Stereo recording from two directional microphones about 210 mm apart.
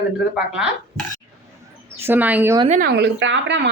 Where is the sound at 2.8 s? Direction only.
55° right (ahead or behind).